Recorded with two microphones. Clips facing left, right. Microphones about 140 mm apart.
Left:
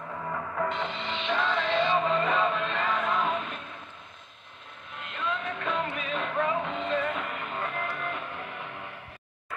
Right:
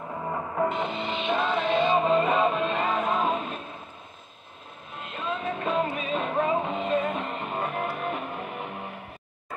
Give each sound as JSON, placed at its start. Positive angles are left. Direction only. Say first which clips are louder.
{"t": 0.1, "sound": "music", "louder": "right 3 dB", "side_deg": -25}
{"t": 4.9, "sound": "music", "louder": "right 1 dB", "side_deg": -25}